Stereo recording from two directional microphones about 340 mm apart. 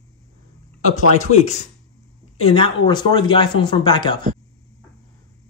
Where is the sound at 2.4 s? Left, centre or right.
Centre.